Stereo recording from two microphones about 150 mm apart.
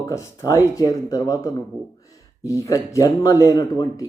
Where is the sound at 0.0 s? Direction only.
20° left (ahead or behind).